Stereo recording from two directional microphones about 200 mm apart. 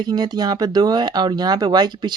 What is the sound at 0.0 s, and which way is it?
Speech, 20° right (ahead or behind).